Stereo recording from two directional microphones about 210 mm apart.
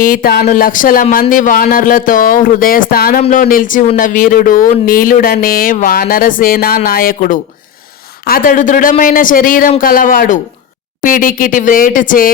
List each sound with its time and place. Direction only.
0.0 s speech: 40° left (ahead or behind)